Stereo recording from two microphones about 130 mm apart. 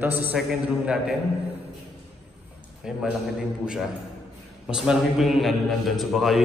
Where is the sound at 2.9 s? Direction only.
5° right (ahead or behind).